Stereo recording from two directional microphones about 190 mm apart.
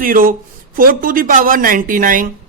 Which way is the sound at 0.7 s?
50° right (ahead or behind).